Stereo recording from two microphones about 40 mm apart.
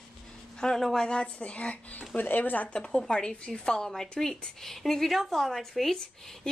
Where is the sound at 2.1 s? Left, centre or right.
Left.